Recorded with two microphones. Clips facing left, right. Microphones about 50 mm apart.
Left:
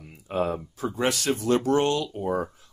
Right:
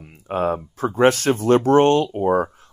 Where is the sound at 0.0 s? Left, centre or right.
Right.